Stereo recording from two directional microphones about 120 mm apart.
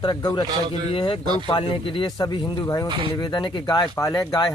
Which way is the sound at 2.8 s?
45° right (ahead or behind).